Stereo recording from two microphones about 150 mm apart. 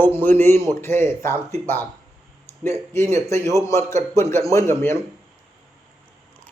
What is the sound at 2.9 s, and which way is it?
A man's voice, 20° left (ahead or behind).